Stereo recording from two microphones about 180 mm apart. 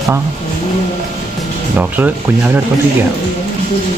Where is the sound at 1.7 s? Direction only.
10° right (ahead or behind).